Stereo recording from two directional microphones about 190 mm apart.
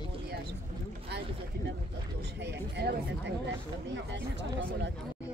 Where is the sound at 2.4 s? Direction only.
60° right (ahead or behind).